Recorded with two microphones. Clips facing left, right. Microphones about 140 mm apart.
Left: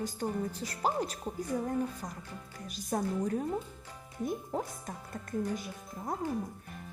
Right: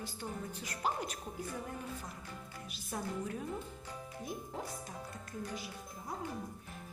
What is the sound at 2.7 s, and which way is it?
Speech, 45° left (ahead or behind).